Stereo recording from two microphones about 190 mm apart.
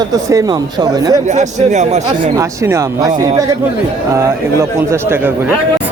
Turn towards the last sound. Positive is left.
turn(degrees=-10)  # may be behind; listen again after turning